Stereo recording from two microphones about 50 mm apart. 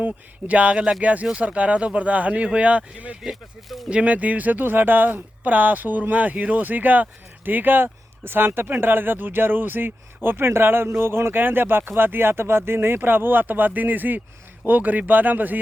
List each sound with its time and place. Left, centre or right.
0.0 s speech: right
3.2 s speech: centre
3.8 s speech: right